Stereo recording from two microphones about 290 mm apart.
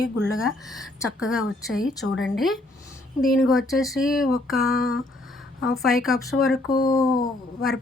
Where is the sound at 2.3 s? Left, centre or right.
Centre.